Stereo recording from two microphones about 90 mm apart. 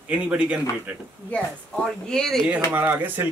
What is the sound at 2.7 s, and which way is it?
Speech, 20° right (ahead or behind).